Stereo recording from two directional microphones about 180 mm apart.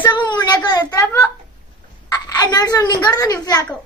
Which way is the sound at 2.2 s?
20° left (ahead or behind).